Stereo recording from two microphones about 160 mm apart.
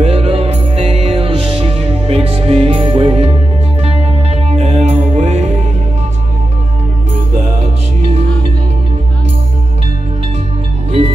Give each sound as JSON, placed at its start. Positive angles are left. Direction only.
{"t": 0.0, "sound": "music", "side_deg": -40}
{"t": 8.0, "sound": "music", "side_deg": -40}